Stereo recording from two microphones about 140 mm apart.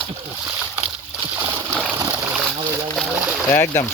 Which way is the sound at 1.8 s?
10° right (ahead or behind).